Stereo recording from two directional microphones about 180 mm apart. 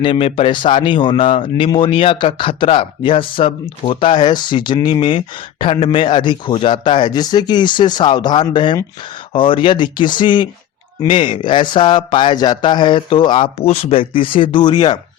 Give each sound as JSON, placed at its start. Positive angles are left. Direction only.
{"t": 0.0, "sound": "speech", "side_deg": 30}